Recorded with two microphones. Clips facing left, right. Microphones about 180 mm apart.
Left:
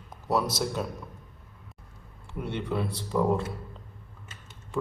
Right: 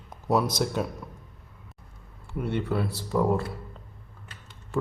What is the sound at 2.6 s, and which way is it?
Speech, 5° right (ahead or behind).